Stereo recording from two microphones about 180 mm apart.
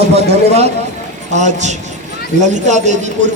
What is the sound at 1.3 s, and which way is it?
A man's voice, 40° right (ahead or behind).